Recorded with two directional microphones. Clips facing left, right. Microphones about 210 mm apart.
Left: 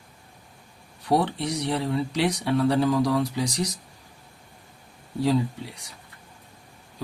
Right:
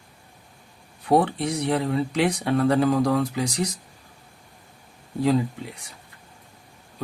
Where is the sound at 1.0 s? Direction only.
50° right (ahead or behind).